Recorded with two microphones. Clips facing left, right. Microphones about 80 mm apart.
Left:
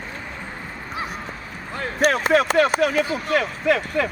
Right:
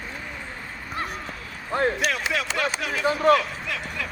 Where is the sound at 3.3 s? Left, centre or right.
Left.